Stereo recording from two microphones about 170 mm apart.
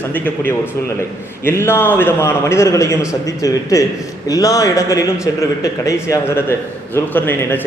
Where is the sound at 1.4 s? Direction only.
15° left (ahead or behind).